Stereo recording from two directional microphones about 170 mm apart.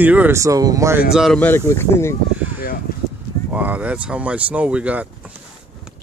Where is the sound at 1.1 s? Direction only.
Centre (ahead or behind).